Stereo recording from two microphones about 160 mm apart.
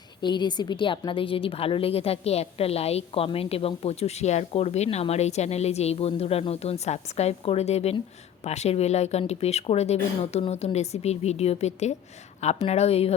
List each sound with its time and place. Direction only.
0.2 s a woman's voice: 30° left (ahead or behind)